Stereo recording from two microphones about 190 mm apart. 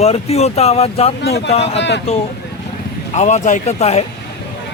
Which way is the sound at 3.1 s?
40° left (ahead or behind).